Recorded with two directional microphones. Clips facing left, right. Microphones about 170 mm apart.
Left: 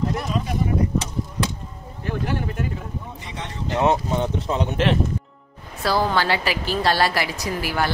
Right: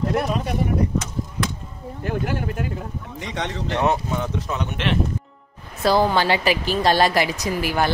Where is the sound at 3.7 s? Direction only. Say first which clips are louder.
Left 2 dB; 20° left (ahead or behind).